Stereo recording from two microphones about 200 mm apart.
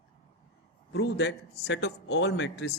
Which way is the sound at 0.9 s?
60° left (ahead or behind).